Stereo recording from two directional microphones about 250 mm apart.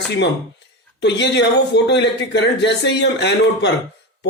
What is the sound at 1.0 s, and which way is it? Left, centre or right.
Speech, left.